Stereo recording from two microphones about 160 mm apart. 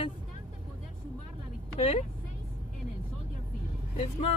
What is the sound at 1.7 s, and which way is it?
Speech, 35° left (ahead or behind).